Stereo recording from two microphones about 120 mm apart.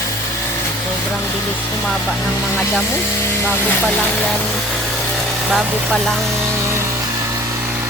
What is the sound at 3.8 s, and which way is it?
Speech, centre (ahead or behind).